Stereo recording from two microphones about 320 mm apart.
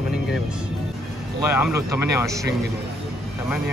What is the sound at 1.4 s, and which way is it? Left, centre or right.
Speech, left.